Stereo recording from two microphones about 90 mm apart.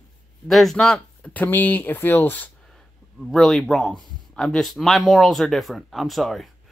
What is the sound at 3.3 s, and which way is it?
Speech, 5° left (ahead or behind).